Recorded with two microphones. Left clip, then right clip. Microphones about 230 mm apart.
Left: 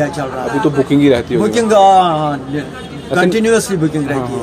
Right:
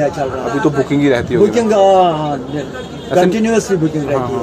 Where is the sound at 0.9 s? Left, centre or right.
Left.